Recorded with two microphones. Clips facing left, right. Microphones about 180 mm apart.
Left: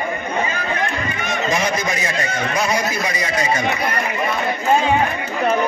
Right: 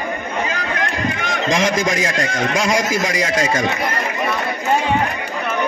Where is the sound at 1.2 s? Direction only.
90° right.